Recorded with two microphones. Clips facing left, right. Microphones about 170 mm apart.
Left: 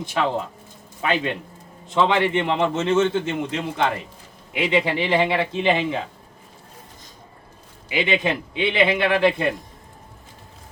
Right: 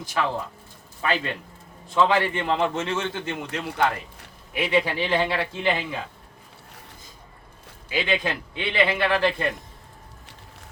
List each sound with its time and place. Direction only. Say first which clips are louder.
0.0 s a man's voice: left 3 dB; 20° left (ahead or behind)
7.9 s a man's voice: left 3 dB; 20° left (ahead or behind)